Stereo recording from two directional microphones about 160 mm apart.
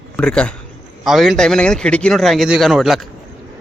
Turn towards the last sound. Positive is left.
turn(degrees=0)  # may be behind; listen again after turning